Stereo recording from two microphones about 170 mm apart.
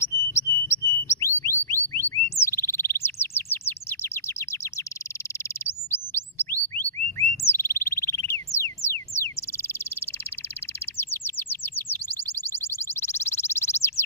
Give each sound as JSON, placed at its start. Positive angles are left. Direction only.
{"t": 0.0, "sound": "bird", "side_deg": 15}
{"t": 2.4, "sound": "chirp", "side_deg": 15}
{"t": 5.9, "sound": "bird", "side_deg": 10}
{"t": 8.5, "sound": "a sound", "side_deg": 15}
{"t": 11.0, "sound": "chirp", "side_deg": 15}